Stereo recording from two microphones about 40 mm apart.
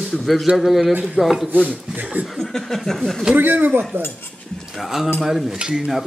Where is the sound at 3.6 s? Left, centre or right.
Right.